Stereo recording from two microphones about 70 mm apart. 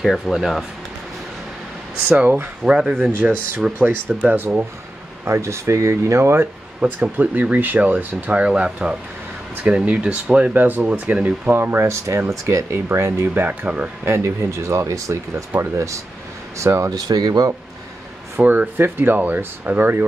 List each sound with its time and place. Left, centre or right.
0.0 s speech: centre
2.0 s speech: right
2.6 s speech: centre
3.6 s speech: centre
4.2 s speech: right
5.2 s speech: right
6.8 s speech: right
10.5 s speech: right
12.7 s speech: right; by 13.8 s centre
14.0 s speech: right
16.5 s speech: right
17.1 s speech: right
18.4 s speech: right